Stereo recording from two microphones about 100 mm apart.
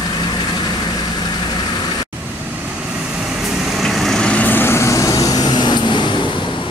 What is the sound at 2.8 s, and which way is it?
Vehicle, 10° right (ahead or behind).